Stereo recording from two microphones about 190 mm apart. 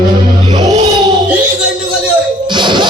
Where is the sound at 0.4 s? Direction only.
25° right (ahead or behind).